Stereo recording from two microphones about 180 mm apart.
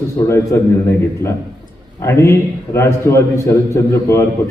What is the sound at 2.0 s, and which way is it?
A man's voice, 15° left (ahead or behind).